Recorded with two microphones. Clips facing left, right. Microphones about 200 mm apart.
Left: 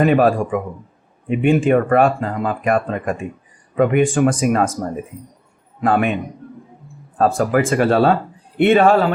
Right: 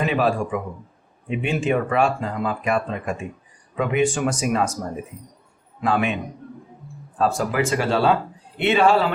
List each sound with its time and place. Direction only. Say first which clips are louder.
0.0 s speech: left 7 dB; 50° left (ahead or behind)
5.8 s speech: left 5 dB; 55° left (ahead or behind)
7.2 s speech: left 5 dB; 55° left (ahead or behind)